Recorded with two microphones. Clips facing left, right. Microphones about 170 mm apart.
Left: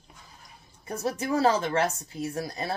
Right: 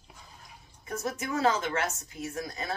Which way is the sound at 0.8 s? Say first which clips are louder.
Left 4 dB; 35° left (ahead or behind).